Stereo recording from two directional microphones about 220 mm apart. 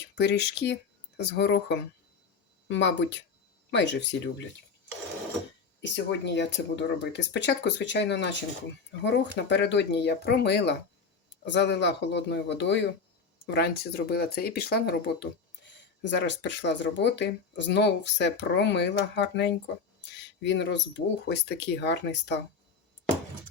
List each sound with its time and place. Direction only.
0.2 s speech: 50° left (ahead or behind)
5.8 s speech: 55° left (ahead or behind)